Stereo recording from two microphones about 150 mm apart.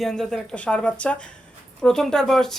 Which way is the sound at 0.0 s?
5° left (ahead or behind).